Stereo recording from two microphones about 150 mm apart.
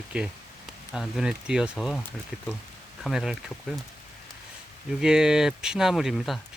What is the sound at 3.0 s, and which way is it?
Speech, 5° right (ahead or behind).